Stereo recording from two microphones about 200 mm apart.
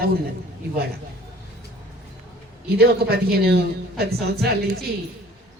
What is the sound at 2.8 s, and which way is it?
A woman's voice, 50° right (ahead or behind).